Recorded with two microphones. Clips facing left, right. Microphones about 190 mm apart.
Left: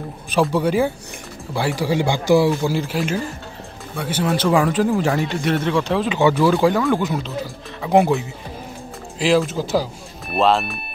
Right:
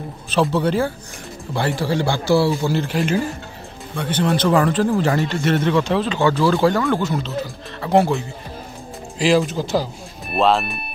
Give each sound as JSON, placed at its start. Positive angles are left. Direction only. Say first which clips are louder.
{"t": 0.3, "sound": "speech", "louder": "even", "side_deg": 10}
{"t": 6.1, "sound": "speech", "louder": "left 3 dB", "side_deg": 20}
{"t": 6.5, "sound": "speech", "louder": "even", "side_deg": 5}
{"t": 7.8, "sound": "speech", "louder": "left 1 dB", "side_deg": 10}
{"t": 9.2, "sound": "speech", "louder": "even", "side_deg": 0}